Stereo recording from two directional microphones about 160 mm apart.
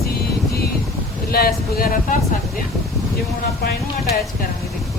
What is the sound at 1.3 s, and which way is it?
Speech, 70° left (ahead or behind).